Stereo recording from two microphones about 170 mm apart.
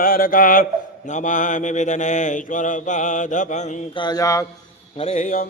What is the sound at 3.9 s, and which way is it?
Mantra, 25° left (ahead or behind).